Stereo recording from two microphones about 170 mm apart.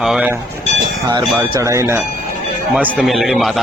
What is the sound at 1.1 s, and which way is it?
Speech, 20° right (ahead or behind).